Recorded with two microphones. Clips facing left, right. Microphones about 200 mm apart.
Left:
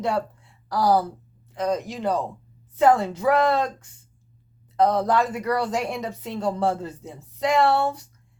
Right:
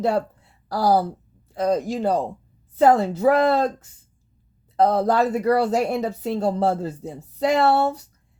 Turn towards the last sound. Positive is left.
turn(degrees=-40)  # may be behind; listen again after turning